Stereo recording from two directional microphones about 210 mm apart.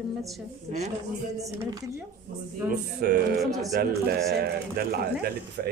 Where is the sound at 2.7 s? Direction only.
45° right (ahead or behind).